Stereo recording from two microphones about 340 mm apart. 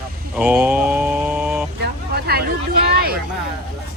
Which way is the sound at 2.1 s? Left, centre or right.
Right.